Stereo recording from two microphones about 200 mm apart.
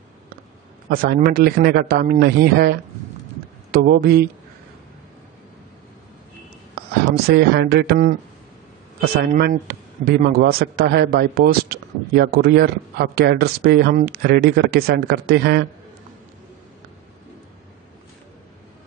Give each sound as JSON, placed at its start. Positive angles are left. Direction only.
{"t": 0.8, "sound": "a man's voice", "side_deg": -45}
{"t": 7.2, "sound": "a man's voice", "side_deg": -50}